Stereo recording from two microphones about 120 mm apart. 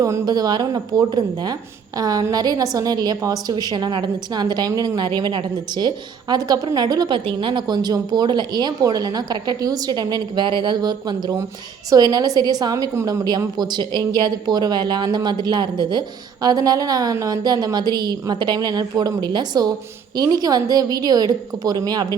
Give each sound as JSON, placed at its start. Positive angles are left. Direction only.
{"t": 0.0, "sound": "a woman's voice", "side_deg": -30}